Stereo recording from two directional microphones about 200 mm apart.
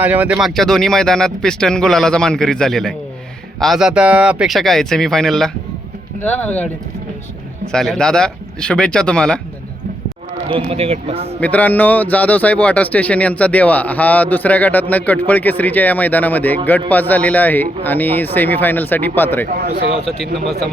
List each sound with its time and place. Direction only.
0.0 s a man's voice: 10° right (ahead or behind); by 6.7 s 5° left (ahead or behind)
7.7 s speech: 5° left (ahead or behind)
10.5 s speech: 30° right (ahead or behind)
11.3 s a man's voice: 5° left (ahead or behind)
19.5 s speech: 40° right (ahead or behind)
19.9 s speech: 30° left (ahead or behind)